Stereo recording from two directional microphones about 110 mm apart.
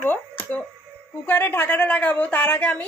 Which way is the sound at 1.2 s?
20° left (ahead or behind).